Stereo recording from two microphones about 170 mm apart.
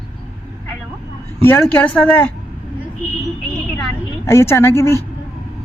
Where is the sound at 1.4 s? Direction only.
15° left (ahead or behind).